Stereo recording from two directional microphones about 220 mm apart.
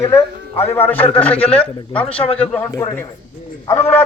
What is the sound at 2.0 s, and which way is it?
Speech, 25° left (ahead or behind).